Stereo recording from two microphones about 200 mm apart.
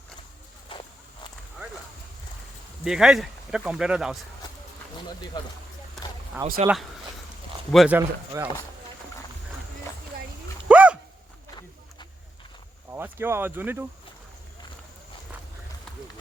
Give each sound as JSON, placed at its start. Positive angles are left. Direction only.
{"t": 0.7, "sound": "walk", "side_deg": 25}
{"t": 2.8, "sound": "speech", "side_deg": 0}
{"t": 5.3, "sound": "speech", "side_deg": 20}
{"t": 6.4, "sound": "speech", "side_deg": -10}
{"t": 7.7, "sound": "speech", "side_deg": -5}
{"t": 10.7, "sound": "dog", "side_deg": -5}
{"t": 12.9, "sound": "speech", "side_deg": -10}